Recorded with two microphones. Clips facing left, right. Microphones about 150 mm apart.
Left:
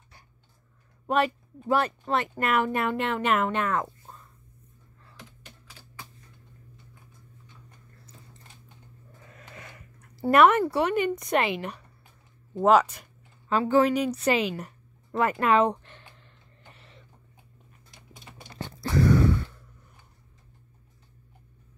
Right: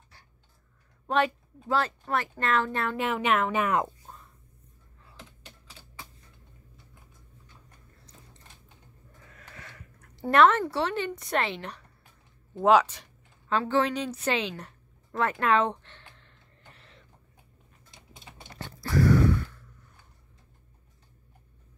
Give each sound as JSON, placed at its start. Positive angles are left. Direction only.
{"t": 1.0, "sound": "speech", "side_deg": 5}
{"t": 1.7, "sound": "speech", "side_deg": 15}
{"t": 3.0, "sound": "speech", "side_deg": -5}
{"t": 3.6, "sound": "speech", "side_deg": -20}
{"t": 9.4, "sound": "speech", "side_deg": 20}
{"t": 15.1, "sound": "a sound", "side_deg": 10}
{"t": 17.9, "sound": "typing", "side_deg": -25}
{"t": 18.6, "sound": "a sound", "side_deg": 20}